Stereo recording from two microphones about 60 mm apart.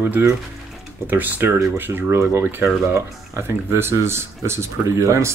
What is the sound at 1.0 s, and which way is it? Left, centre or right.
Speech, right.